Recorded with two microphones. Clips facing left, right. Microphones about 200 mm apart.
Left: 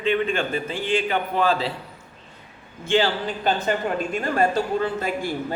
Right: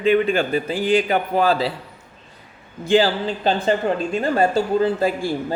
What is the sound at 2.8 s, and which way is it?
A man's voice, 35° right (ahead or behind).